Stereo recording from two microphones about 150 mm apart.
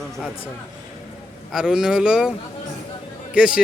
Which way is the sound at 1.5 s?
5° right (ahead or behind).